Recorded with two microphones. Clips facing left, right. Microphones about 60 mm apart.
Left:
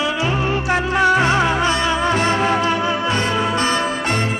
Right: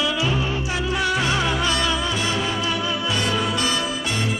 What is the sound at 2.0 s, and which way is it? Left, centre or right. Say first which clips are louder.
Music: left 7 dB; left.